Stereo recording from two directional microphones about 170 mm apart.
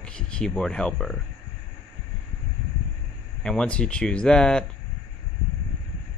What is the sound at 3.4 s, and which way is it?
Speech, 5° left (ahead or behind).